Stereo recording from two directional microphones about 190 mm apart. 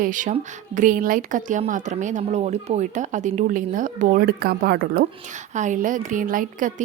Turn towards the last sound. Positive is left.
turn(degrees=-45)  # may be behind; listen again after turning